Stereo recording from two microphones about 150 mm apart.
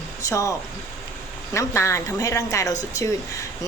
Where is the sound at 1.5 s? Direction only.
20° left (ahead or behind).